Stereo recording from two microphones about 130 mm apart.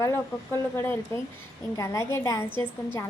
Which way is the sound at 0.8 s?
15° left (ahead or behind).